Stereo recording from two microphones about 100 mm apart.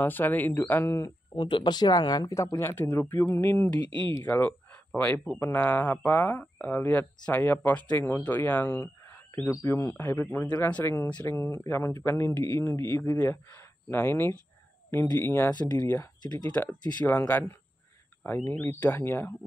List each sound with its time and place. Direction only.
0.0 s speech: 20° left (ahead or behind)
1.3 s speech: 55° left (ahead or behind); by 5.4 s 10° left (ahead or behind)
5.4 s speech: 20° left (ahead or behind)
15.8 s speech: 35° left (ahead or behind)
16.5 s speech: 15° left (ahead or behind)